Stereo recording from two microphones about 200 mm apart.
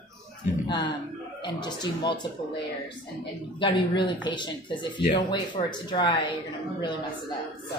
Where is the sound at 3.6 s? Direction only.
25° left (ahead or behind).